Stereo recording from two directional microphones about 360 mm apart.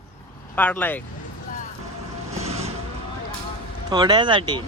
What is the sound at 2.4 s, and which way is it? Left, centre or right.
Vehicle, centre.